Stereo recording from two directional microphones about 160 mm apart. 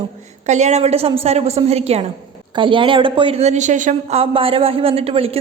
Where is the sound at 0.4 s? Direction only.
45° right (ahead or behind).